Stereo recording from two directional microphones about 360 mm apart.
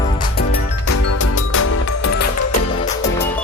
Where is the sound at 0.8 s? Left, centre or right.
Left.